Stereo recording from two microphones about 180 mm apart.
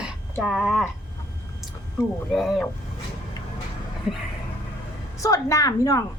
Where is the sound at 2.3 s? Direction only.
Centre (ahead or behind).